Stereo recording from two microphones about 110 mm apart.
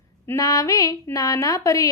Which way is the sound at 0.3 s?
30° left (ahead or behind).